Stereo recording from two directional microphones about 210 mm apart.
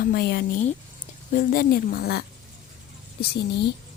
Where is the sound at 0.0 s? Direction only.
45° left (ahead or behind).